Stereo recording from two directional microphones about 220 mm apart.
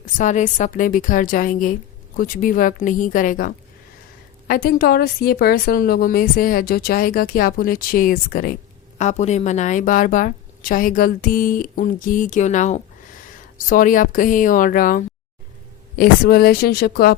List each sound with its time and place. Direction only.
0.0 s a woman's voice: 35° left (ahead or behind)